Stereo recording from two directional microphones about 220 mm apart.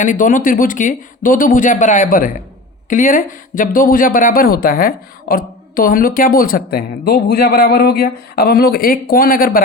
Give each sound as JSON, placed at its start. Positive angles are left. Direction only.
{"t": 0.0, "sound": "speech", "side_deg": 35}